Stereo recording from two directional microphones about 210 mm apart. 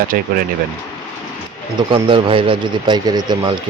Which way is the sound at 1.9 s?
25° right (ahead or behind).